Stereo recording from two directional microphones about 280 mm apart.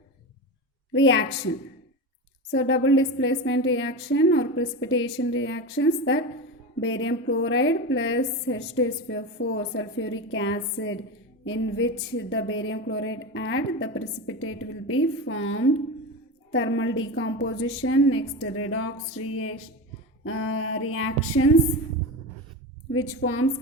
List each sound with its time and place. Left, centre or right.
0.9 s a woman's voice: left
2.5 s a woman's voice: left
22.9 s a woman's voice: left